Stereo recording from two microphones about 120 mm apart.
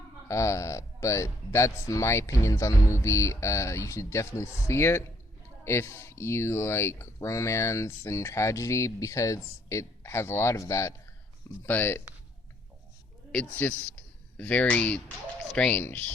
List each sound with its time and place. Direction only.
0.3 s speech: 25° left (ahead or behind)
13.6 s a man's voice: 10° left (ahead or behind)